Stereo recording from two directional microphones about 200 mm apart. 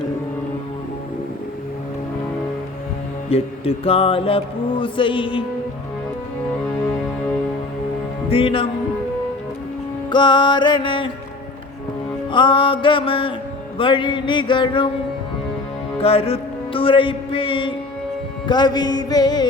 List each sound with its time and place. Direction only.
3.2 s mantra: 30° left (ahead or behind)
8.3 s mantra: 25° left (ahead or behind)
10.1 s mantra: 20° left (ahead or behind)
12.3 s mantra: 25° left (ahead or behind)
16.0 s music: 30° left (ahead or behind)
18.4 s mantra: 20° left (ahead or behind)